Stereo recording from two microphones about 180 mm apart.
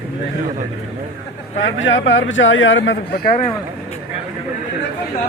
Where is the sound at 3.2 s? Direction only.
45° left (ahead or behind).